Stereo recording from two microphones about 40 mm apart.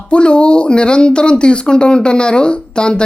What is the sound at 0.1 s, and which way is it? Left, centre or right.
Speech, left.